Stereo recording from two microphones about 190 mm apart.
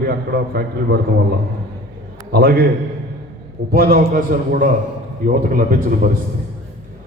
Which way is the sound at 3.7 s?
50° right (ahead or behind).